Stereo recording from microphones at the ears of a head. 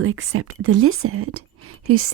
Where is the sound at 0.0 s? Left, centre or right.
Right.